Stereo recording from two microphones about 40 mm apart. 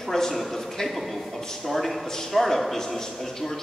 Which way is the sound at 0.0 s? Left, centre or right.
Centre.